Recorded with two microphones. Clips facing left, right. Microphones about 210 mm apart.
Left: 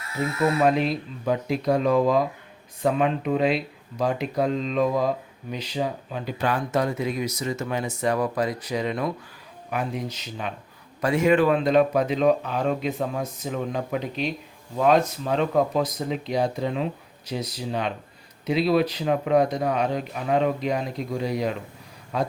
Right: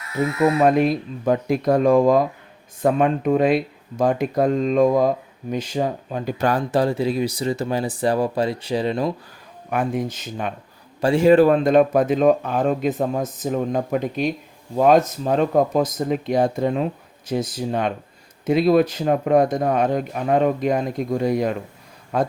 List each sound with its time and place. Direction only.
0.6 s speech: 50° right (ahead or behind); by 9.1 s 30° right (ahead or behind)
9.6 s speech: 50° right (ahead or behind)
11.0 s speech: 30° right (ahead or behind); by 22.3 s 50° right (ahead or behind)